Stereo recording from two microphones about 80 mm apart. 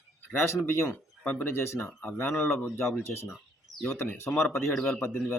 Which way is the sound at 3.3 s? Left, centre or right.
Centre.